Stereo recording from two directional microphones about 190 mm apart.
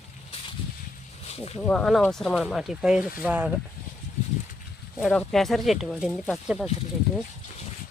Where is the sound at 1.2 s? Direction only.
35° left (ahead or behind).